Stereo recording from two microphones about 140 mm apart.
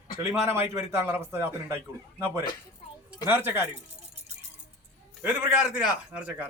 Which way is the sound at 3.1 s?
15° right (ahead or behind).